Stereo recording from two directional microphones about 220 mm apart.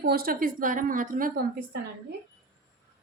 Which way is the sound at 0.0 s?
45° right (ahead or behind).